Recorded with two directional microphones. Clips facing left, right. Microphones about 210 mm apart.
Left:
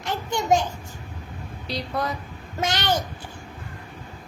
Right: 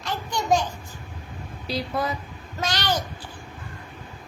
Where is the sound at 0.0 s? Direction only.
25° left (ahead or behind).